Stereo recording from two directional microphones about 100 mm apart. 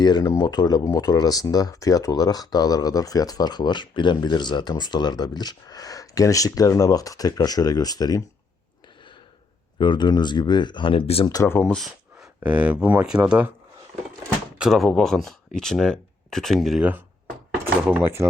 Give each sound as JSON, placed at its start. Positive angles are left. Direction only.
{"t": 0.0, "sound": "speech", "side_deg": 45}
{"t": 9.7, "sound": "speech", "side_deg": 50}
{"t": 11.6, "sound": "speech", "side_deg": 5}
{"t": 12.4, "sound": "speech", "side_deg": -15}
{"t": 14.6, "sound": "speech", "side_deg": 0}
{"t": 17.9, "sound": "speech", "side_deg": -25}